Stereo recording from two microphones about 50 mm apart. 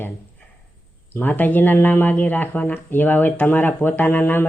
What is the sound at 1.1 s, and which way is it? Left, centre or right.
Speech, left.